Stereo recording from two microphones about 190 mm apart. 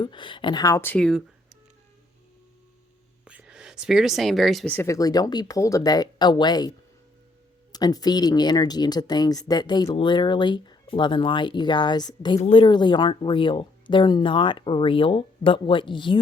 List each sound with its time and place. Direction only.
0.0 s speech: 25° left (ahead or behind); by 1.2 s 5° left (ahead or behind)
3.2 s speech: 5° right (ahead or behind); by 16.2 s 25° left (ahead or behind)